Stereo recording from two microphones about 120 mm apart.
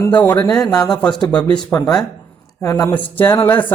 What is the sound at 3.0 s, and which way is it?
Speech, 15° left (ahead or behind).